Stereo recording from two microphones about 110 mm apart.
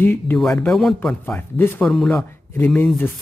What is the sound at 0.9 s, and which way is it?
Speech, 15° left (ahead or behind).